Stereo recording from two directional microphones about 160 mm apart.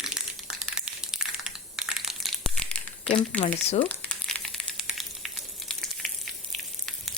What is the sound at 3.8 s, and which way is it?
Frying, 5° left (ahead or behind).